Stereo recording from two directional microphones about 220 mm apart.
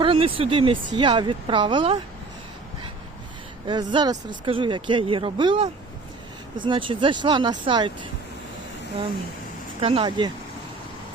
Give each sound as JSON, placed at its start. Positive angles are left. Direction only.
{"t": 0.0, "sound": "speech", "side_deg": -25}
{"t": 3.7, "sound": "speech", "side_deg": -20}
{"t": 9.8, "sound": "speech", "side_deg": -25}